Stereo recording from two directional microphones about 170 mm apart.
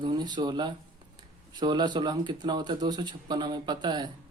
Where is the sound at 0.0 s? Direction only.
25° right (ahead or behind).